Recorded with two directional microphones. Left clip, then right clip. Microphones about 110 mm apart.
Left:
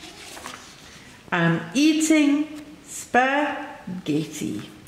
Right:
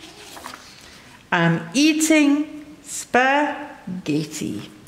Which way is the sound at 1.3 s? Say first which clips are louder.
Right 3 dB; 35° right (ahead or behind).